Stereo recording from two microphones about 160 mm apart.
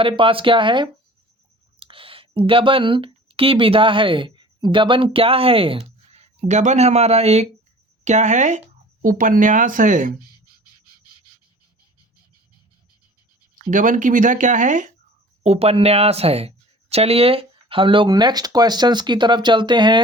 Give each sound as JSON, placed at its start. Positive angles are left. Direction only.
{"t": 0.0, "sound": "speech", "side_deg": -35}
{"t": 13.6, "sound": "speech", "side_deg": -55}
{"t": 15.4, "sound": "speech", "side_deg": -40}